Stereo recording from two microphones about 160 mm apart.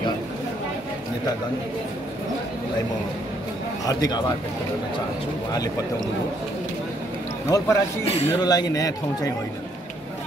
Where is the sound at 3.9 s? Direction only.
25° left (ahead or behind).